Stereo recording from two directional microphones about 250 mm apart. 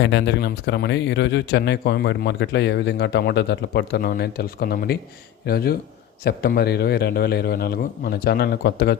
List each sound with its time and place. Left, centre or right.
0.0 s a man's voice: left